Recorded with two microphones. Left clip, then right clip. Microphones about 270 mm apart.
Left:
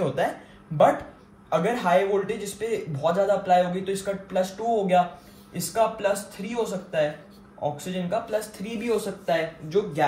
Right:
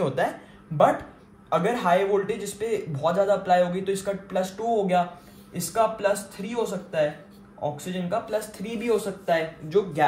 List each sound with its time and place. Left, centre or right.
0.0 s a man's voice: right
1.5 s a man's voice: right
8.6 s speech: right